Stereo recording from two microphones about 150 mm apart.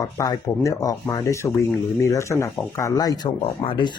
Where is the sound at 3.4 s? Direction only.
35° left (ahead or behind).